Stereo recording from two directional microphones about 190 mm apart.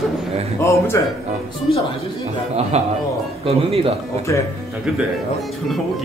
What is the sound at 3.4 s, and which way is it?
Speech, 30° right (ahead or behind).